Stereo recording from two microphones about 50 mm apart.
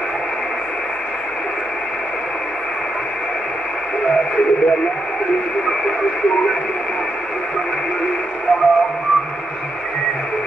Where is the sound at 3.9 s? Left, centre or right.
Centre.